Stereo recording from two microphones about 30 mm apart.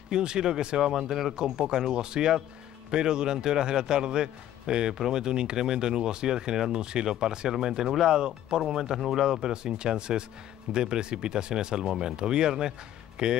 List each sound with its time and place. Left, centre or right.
0.1 s a man's voice: right
0.7 s speech: centre
1.3 s a man's voice: right